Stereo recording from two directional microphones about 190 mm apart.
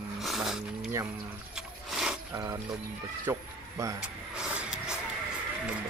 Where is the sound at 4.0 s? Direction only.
5° right (ahead or behind).